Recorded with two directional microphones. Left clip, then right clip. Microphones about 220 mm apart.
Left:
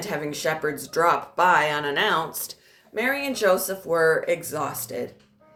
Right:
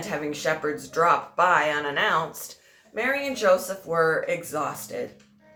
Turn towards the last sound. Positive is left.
turn(degrees=50)  # may be behind; listen again after turning